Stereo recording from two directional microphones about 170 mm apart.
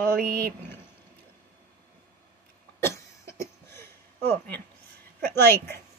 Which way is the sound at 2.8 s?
15° left (ahead or behind).